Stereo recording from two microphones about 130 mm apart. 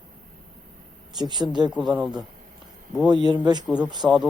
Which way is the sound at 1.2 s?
35° right (ahead or behind).